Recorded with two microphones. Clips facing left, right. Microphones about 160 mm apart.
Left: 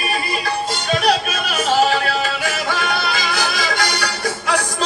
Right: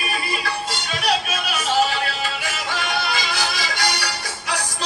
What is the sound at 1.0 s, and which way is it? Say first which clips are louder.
Music: left 1 dB; 50° left (ahead or behind).